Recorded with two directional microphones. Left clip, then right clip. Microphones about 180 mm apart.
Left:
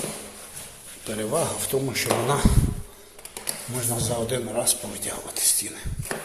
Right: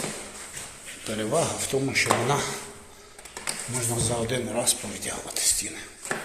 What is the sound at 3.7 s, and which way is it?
A man's voice, 10° left (ahead or behind).